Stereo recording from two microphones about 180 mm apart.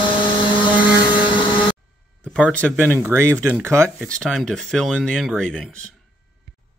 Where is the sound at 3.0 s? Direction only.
15° right (ahead or behind).